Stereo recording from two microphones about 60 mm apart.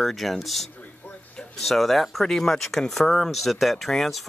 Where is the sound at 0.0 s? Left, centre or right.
Centre.